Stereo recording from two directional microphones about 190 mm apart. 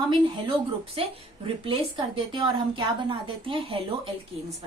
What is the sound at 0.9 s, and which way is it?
A woman's voice, 30° right (ahead or behind).